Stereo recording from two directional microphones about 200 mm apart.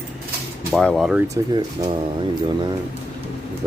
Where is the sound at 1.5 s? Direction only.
20° right (ahead or behind).